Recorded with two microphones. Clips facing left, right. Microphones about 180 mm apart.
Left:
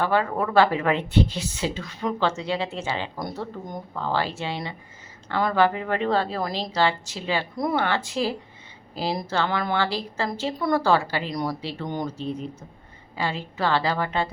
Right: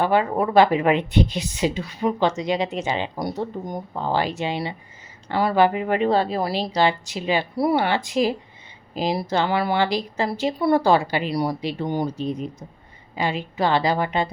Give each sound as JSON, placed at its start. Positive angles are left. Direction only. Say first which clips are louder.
{"t": 0.0, "sound": "speech", "louder": "right 3 dB", "side_deg": -15}